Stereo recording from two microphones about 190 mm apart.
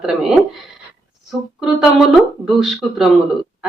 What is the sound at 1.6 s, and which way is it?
A woman's voice, centre (ahead or behind).